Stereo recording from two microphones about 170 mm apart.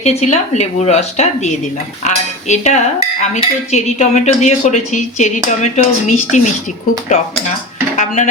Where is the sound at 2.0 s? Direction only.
45° left (ahead or behind).